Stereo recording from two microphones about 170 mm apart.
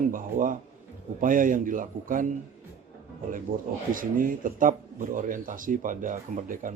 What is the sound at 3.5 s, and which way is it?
Speech, 55° right (ahead or behind).